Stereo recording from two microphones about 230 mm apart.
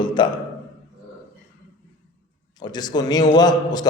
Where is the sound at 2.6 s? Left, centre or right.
Centre.